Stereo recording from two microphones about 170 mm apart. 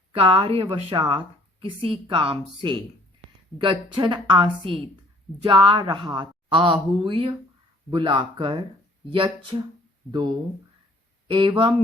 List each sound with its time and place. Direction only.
0.1 s speech: 30° right (ahead or behind)